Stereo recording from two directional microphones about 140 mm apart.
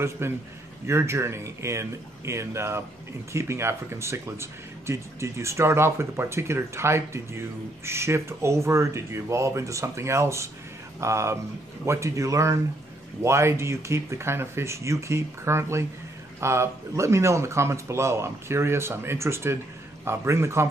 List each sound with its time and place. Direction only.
0.2 s a man's voice: 15° right (ahead or behind)